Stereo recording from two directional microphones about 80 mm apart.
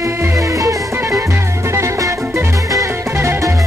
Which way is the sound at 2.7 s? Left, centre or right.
Right.